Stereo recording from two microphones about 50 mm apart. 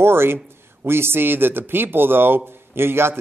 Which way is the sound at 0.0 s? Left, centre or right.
Right.